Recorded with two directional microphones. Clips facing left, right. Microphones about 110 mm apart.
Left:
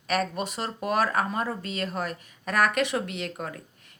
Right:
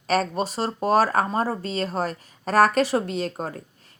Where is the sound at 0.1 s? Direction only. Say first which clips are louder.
Right 4 dB; 35° right (ahead or behind).